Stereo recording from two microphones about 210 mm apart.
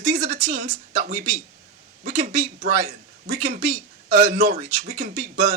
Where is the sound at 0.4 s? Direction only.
40° right (ahead or behind).